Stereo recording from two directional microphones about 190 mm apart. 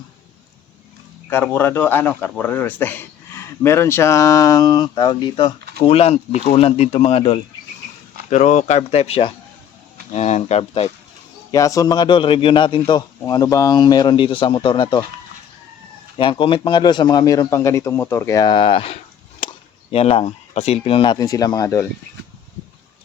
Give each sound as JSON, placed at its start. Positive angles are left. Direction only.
{"t": 1.3, "sound": "speech", "side_deg": 10}
{"t": 11.5, "sound": "a man's voice", "side_deg": 15}
{"t": 16.1, "sound": "a man's voice", "side_deg": 25}